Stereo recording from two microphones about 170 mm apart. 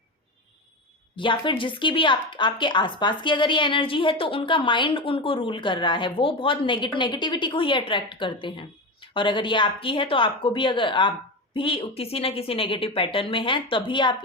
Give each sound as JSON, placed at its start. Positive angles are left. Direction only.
{"t": 1.1, "sound": "a woman's voice", "side_deg": 30}